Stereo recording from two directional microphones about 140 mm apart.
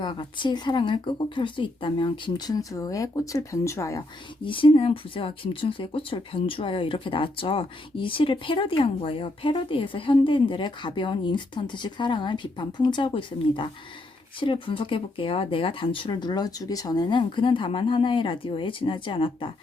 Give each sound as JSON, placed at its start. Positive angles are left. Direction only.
{"t": 0.0, "sound": "speech", "side_deg": 35}
{"t": 4.4, "sound": "speech", "side_deg": 35}